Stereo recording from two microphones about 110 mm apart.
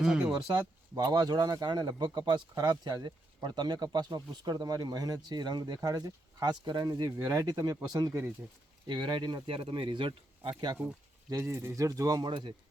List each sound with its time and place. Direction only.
0.0 s speech: 5° right (ahead or behind)
0.3 s speech: 40° right (ahead or behind)
8.9 s speech: 45° right (ahead or behind)
11.3 s speech: 25° right (ahead or behind); by 12.5 s 45° right (ahead or behind)